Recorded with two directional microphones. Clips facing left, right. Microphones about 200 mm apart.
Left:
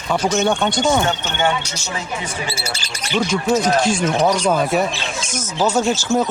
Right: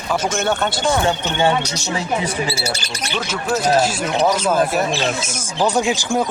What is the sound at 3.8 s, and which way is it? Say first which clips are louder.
Speech: left 1 dB; 5° right (ahead or behind).